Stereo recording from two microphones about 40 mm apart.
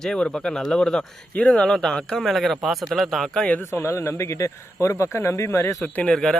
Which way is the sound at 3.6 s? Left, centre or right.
Left.